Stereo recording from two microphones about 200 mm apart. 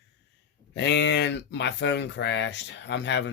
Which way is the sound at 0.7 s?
60° left (ahead or behind).